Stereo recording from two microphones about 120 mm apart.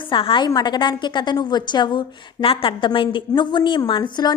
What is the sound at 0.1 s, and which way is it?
A woman's voice, 45° left (ahead or behind).